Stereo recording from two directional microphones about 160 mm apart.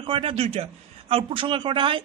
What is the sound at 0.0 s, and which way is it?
A woman's voice, 35° right (ahead or behind).